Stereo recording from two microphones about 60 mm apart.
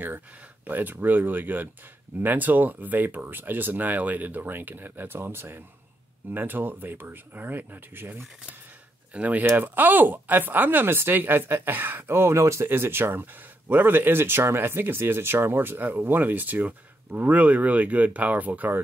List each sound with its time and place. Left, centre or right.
0.7 s speech: right
9.1 s speech: right
12.6 s speech: right